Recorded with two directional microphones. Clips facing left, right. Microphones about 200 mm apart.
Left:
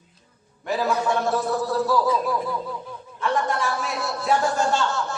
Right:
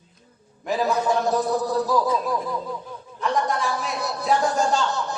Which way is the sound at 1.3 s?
15° right (ahead or behind).